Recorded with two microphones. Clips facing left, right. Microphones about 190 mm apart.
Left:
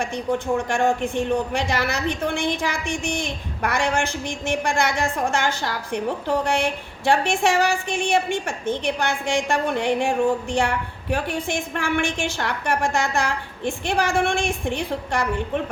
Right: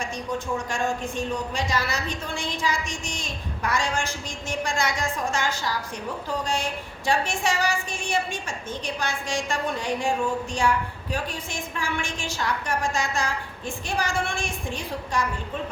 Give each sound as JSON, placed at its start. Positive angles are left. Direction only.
{"t": 0.0, "sound": "a woman's voice", "side_deg": 60}